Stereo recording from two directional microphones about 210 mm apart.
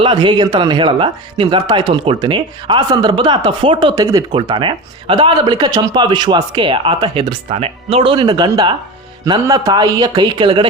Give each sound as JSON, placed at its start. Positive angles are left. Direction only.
{"t": 0.0, "sound": "speech", "side_deg": -20}